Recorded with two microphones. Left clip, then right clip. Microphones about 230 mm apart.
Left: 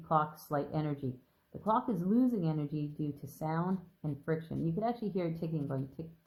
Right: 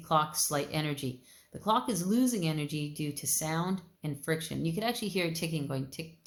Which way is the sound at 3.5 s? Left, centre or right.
Right.